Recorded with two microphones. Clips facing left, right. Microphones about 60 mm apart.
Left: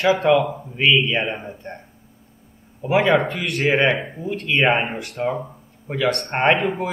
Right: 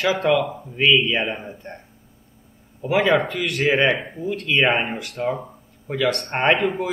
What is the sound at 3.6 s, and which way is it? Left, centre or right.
Speech, centre.